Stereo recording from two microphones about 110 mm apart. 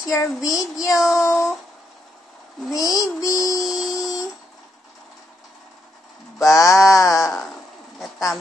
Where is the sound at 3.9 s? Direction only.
30° left (ahead or behind).